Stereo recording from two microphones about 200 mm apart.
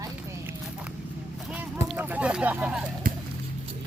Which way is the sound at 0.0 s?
5° right (ahead or behind).